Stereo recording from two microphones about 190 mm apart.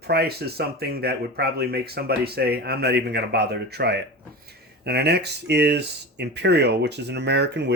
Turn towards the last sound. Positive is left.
turn(degrees=-65)  # may be behind; listen again after turning